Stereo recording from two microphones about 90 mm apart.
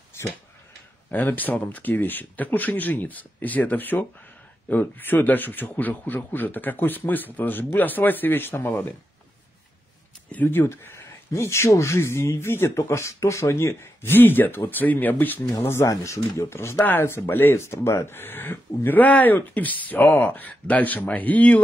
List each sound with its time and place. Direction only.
0.1 s a sound: 30° left (ahead or behind)
1.1 s speech: 20° left (ahead or behind)
10.3 s speech: 20° left (ahead or behind)